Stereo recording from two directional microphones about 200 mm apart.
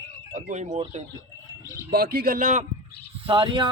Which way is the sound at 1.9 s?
50° right (ahead or behind).